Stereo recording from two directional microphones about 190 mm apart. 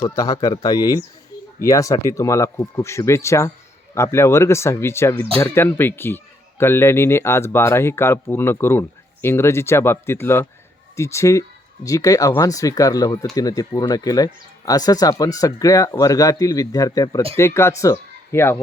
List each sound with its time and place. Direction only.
0.0 s speech: 20° left (ahead or behind)